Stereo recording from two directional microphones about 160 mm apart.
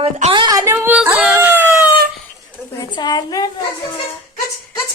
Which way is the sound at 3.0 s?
25° left (ahead or behind).